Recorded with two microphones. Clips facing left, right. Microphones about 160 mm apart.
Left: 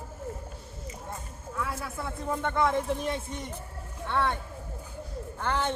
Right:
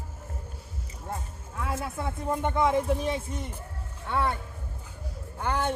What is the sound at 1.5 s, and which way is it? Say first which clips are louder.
Speech: right 2 dB; 25° right (ahead or behind).